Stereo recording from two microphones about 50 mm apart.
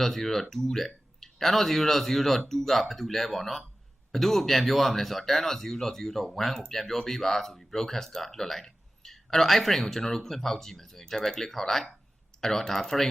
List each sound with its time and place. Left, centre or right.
0.0 s speech: centre